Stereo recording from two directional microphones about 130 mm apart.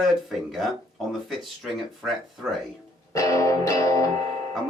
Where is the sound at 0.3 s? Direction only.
Centre (ahead or behind).